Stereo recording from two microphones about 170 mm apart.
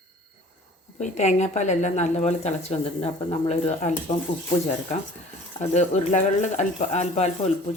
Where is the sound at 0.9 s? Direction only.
45° left (ahead or behind).